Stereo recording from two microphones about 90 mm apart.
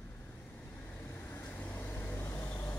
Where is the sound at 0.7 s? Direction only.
20° left (ahead or behind).